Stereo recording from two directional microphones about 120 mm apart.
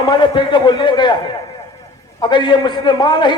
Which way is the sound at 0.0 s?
40° left (ahead or behind).